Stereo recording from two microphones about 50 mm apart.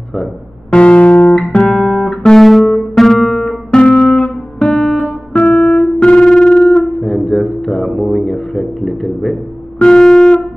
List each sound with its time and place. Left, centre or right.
0.7 s music: left
1.7 s guitar: centre
3.0 s music: centre
7.0 s music: centre
9.8 s music: centre